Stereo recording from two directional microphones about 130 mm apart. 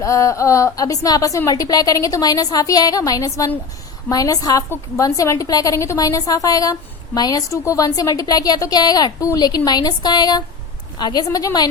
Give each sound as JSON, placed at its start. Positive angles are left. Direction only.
{"t": 0.0, "sound": "a woman's voice", "side_deg": 25}